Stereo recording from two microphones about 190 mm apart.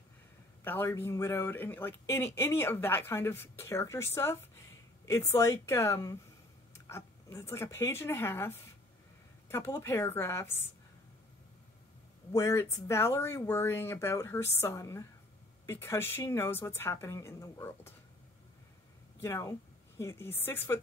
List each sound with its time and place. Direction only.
0.7 s speech: 10° left (ahead or behind)
12.3 s speech: 15° left (ahead or behind)
19.2 s speech: 15° left (ahead or behind)